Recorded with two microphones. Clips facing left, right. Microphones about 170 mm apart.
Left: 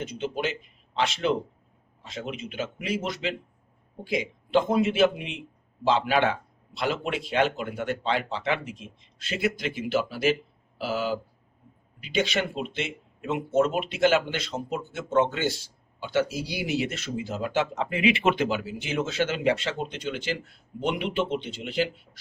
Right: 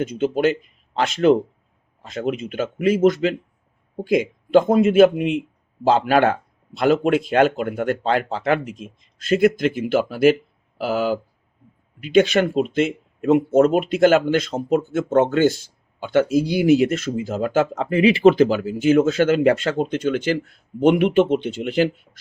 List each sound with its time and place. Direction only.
0.0 s speech: 50° right (ahead or behind)